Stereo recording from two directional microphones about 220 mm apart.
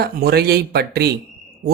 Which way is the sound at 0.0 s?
45° right (ahead or behind).